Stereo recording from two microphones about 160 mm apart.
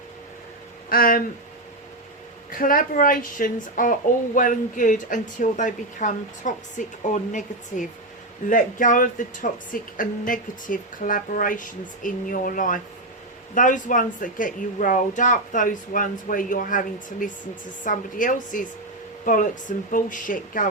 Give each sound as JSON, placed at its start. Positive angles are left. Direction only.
{"t": 0.9, "sound": "speech", "side_deg": 65}
{"t": 2.5, "sound": "speech", "side_deg": 60}